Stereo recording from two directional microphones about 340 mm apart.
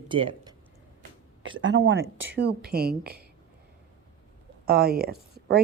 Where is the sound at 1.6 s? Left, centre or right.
Right.